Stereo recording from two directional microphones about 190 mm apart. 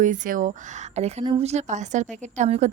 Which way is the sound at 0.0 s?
40° right (ahead or behind).